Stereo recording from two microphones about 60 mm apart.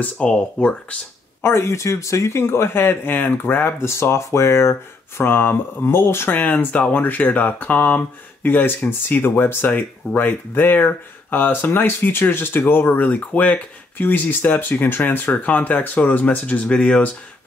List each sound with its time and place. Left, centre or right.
0.2 s speech: centre
1.4 s speech: left
6.3 s speech: left